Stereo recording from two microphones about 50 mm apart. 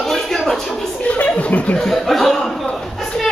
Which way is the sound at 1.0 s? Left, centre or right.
Left.